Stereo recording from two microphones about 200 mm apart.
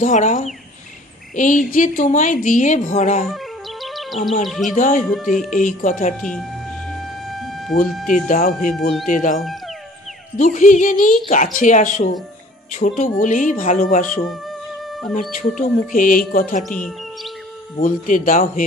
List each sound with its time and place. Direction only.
0.0 s a woman's voice: 35° left (ahead or behind)
3.3 s music: centre (ahead or behind)
4.5 s speech: centre (ahead or behind)
4.7 s a woman's voice: 40° left (ahead or behind)
5.1 s speech: centre (ahead or behind)
5.5 s a woman's voice: 40° left (ahead or behind)
7.0 s music: centre (ahead or behind)
8.1 s a woman's voice: 45° left (ahead or behind)
14.9 s music: centre (ahead or behind)
15.3 s speech: 40° left (ahead or behind)
16.6 s speech: 5° left (ahead or behind)
17.7 s speech: 40° left (ahead or behind)